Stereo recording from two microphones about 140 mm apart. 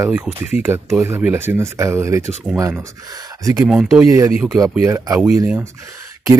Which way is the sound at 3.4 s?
25° right (ahead or behind).